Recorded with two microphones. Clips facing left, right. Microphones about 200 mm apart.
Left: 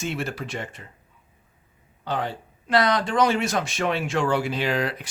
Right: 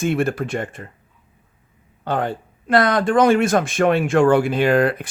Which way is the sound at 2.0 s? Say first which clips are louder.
Right 6 dB; 50° right (ahead or behind).